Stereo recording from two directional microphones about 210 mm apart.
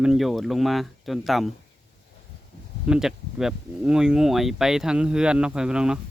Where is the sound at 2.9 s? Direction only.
Centre (ahead or behind).